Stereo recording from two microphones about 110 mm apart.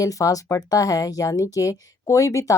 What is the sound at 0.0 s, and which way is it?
Speech, 30° left (ahead or behind).